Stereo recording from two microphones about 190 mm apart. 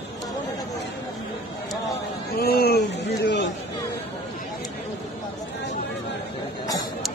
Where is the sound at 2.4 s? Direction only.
55° left (ahead or behind).